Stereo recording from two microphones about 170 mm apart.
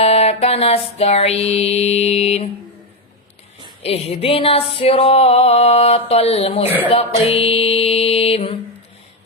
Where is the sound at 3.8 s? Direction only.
35° left (ahead or behind).